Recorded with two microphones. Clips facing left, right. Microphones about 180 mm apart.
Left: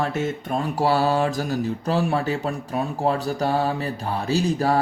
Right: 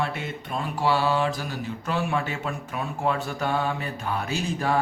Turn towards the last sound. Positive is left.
turn(degrees=35)  # may be behind; listen again after turning